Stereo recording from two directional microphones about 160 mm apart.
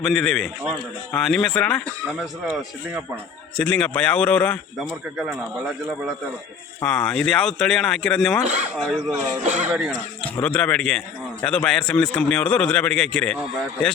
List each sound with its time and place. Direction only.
0.0 s speech: 5° left (ahead or behind)
3.6 s a man's voice: 10° left (ahead or behind)
5.1 s speech: 5° right (ahead or behind)
9.4 s speech: 50° right (ahead or behind)
9.6 s speech: 10° right (ahead or behind)
10.2 s a man's voice: 10° left (ahead or behind)